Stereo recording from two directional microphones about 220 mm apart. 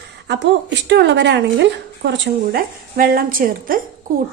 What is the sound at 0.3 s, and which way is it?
A woman's voice, 50° right (ahead or behind).